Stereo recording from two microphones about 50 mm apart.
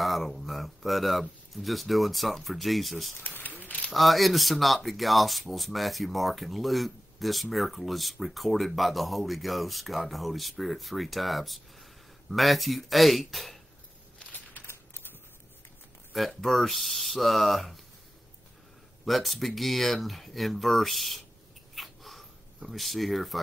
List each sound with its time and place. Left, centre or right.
0.0 s speech: centre
3.3 s a sound: left
3.9 s speech: centre
16.1 s speech: centre
19.0 s speech: centre
21.7 s a sound: centre